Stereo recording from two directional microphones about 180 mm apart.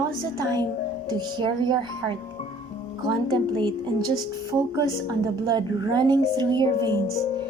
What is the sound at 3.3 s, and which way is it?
Speech, 25° right (ahead or behind).